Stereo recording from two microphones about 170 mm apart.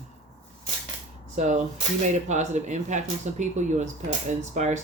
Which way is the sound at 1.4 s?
40° right (ahead or behind).